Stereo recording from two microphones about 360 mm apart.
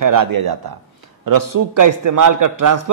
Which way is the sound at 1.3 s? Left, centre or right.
Right.